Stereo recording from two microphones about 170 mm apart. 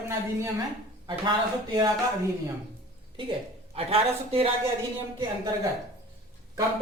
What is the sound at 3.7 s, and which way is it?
Speech, 35° right (ahead or behind).